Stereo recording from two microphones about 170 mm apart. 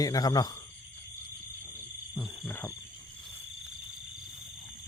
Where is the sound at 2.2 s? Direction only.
10° left (ahead or behind).